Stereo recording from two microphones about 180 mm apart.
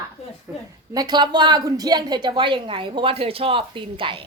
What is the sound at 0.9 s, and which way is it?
A woman's voice, 25° right (ahead or behind).